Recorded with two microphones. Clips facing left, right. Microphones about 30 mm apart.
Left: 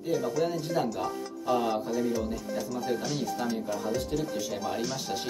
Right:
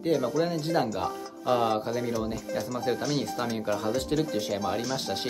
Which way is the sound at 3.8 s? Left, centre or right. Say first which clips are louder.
Right 3 dB; right.